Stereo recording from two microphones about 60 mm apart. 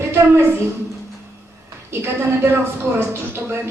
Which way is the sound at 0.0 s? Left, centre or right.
Right.